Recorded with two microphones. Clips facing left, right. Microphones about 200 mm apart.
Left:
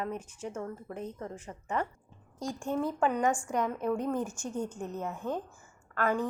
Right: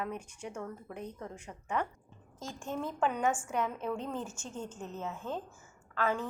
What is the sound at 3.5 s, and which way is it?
A woman's voice, 15° left (ahead or behind).